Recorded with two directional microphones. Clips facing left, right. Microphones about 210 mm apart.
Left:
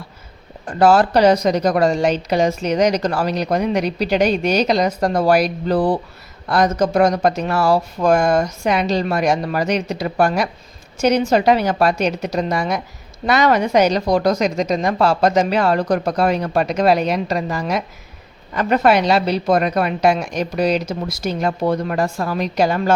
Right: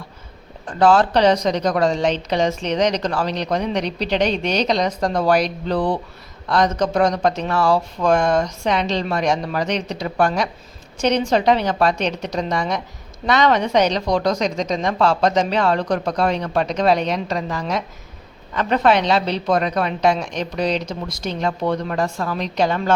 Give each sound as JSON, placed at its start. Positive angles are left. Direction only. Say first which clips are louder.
{"t": 0.7, "sound": "a woman's voice", "louder": "left 2 dB", "side_deg": 10}